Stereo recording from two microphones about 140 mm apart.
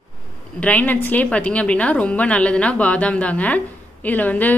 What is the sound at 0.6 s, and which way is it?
A woman's voice, 10° left (ahead or behind).